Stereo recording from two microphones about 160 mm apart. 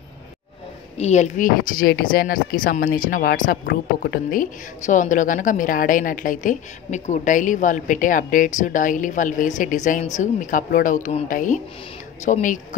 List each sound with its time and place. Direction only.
0.9 s a woman's voice: 45° left (ahead or behind)